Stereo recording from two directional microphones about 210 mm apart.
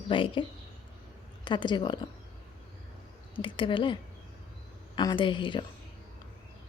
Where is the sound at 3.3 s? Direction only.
25° left (ahead or behind).